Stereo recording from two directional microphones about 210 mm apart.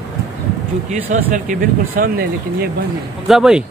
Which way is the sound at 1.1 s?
40° right (ahead or behind).